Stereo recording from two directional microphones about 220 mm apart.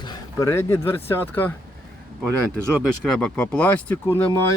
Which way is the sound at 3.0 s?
5° left (ahead or behind).